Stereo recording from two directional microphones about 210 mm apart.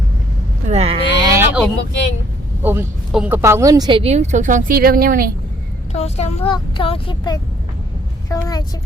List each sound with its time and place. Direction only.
0.7 s a sound: 30° right (ahead or behind)
1.4 s vehicle: 5° right (ahead or behind)
2.6 s speech: 5° right (ahead or behind); by 5.3 s 45° right (ahead or behind)
5.9 s a woman's voice: 30° left (ahead or behind)